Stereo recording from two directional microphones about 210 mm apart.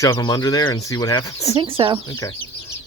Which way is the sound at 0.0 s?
15° left (ahead or behind).